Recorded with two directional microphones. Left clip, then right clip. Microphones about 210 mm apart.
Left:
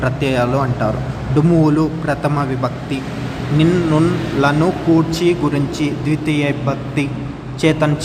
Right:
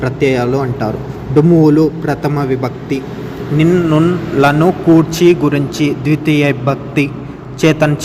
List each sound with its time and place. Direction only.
0.0 s a man's voice: 10° right (ahead or behind)